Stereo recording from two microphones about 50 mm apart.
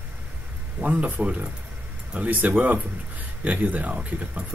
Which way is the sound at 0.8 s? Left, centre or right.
Right.